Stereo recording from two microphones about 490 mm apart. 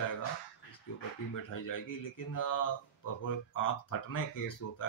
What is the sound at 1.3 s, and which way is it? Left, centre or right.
Speech, left.